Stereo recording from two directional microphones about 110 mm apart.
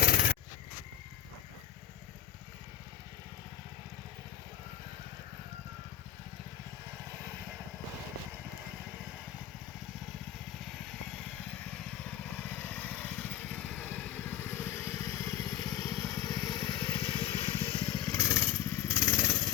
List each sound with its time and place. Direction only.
12.2 s vehicle: 15° left (ahead or behind)